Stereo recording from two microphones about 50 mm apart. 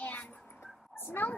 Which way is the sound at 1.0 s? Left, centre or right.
Left.